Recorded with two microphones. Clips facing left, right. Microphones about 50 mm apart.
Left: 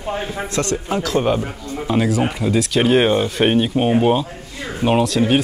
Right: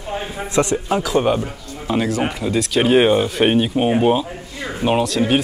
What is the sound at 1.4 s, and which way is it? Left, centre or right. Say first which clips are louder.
Speech: left 2 dB; centre.